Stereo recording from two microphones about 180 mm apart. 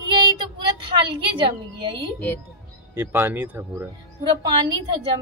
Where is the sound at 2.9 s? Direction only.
10° right (ahead or behind).